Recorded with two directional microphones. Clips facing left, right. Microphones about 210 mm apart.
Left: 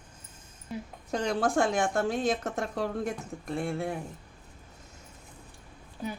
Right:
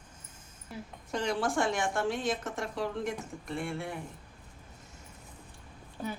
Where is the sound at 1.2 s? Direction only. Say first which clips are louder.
Left 3 dB; 45° left (ahead or behind).